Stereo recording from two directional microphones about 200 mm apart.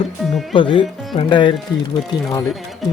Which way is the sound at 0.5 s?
25° left (ahead or behind).